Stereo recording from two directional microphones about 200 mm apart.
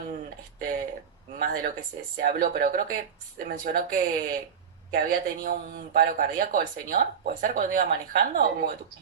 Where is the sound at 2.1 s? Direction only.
45° right (ahead or behind).